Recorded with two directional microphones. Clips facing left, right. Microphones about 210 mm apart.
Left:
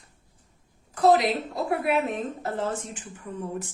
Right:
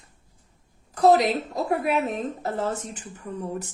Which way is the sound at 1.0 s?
40° right (ahead or behind).